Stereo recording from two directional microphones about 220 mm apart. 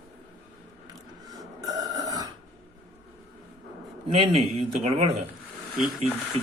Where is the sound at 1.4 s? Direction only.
15° right (ahead or behind).